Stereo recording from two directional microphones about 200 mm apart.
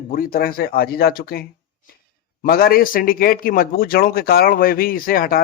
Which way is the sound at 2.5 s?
45° left (ahead or behind).